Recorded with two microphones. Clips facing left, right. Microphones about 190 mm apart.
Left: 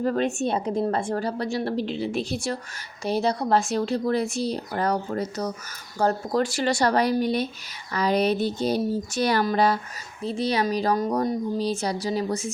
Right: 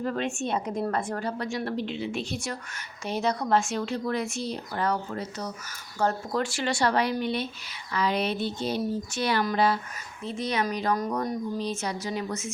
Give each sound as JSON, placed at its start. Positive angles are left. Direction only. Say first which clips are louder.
{"t": 0.0, "sound": "a woman's voice", "louder": "left 5 dB", "side_deg": 40}